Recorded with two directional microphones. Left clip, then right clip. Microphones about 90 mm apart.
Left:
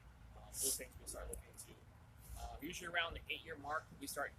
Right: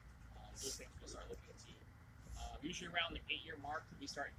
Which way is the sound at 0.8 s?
40° left (ahead or behind).